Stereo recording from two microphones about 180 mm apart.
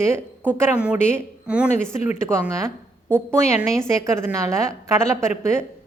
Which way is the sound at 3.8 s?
15° right (ahead or behind).